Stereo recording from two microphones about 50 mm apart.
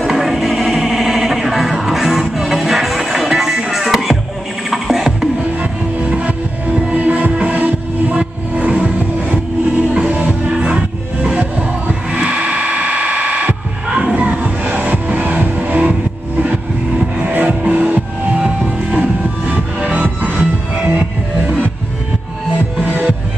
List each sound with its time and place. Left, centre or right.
0.0 s music: centre
5.6 s music: right
17.2 s music: right